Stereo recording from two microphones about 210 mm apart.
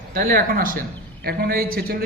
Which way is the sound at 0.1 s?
45° right (ahead or behind).